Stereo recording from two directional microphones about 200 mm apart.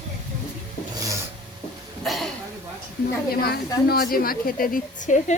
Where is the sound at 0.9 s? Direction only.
15° right (ahead or behind).